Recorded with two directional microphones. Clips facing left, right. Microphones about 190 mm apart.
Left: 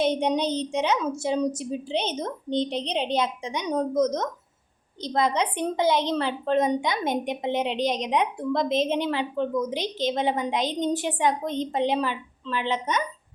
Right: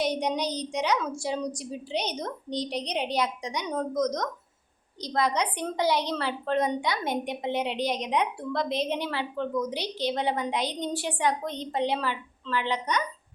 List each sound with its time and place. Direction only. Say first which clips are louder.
0.0 s a woman's voice: left 4 dB; 25° left (ahead or behind)